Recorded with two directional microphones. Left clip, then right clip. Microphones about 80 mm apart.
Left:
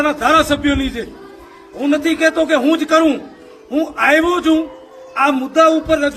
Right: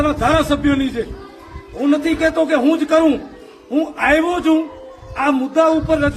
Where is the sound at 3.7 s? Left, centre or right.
Centre.